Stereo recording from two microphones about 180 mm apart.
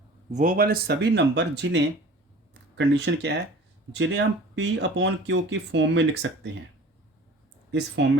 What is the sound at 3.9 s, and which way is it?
Speech, 85° right.